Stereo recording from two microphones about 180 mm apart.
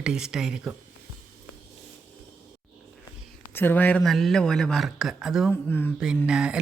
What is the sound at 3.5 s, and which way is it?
Speech, 10° left (ahead or behind).